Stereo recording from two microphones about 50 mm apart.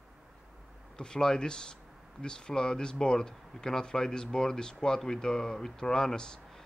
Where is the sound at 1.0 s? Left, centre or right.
Centre.